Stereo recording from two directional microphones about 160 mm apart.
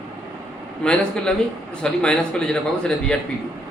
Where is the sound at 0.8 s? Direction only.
5° left (ahead or behind).